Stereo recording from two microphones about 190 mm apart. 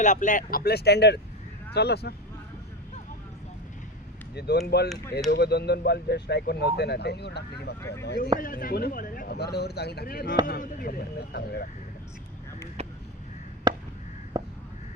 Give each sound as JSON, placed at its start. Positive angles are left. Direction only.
{"t": 0.0, "sound": "speech", "side_deg": 40}
{"t": 4.4, "sound": "speech", "side_deg": 60}
{"t": 7.8, "sound": "speech", "side_deg": 15}
{"t": 8.0, "sound": "speech", "side_deg": 55}
{"t": 13.7, "sound": "a sound", "side_deg": -20}
{"t": 14.3, "sound": "crow", "side_deg": -20}